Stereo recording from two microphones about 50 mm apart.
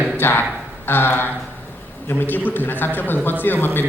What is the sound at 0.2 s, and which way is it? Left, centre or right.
Speech, left.